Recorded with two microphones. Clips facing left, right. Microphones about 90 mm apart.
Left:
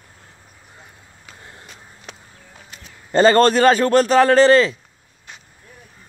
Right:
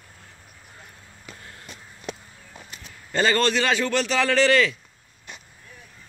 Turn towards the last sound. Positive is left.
turn(degrees=35)  # may be behind; listen again after turning